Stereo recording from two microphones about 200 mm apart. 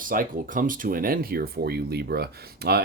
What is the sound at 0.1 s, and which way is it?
Speech, 45° right (ahead or behind).